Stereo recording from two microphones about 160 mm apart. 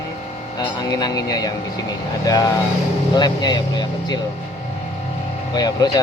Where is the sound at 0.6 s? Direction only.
25° left (ahead or behind).